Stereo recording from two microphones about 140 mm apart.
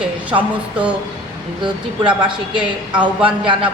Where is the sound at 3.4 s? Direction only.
40° right (ahead or behind).